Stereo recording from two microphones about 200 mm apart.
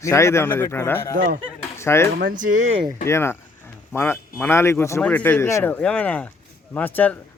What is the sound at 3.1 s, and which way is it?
Speech, 10° left (ahead or behind).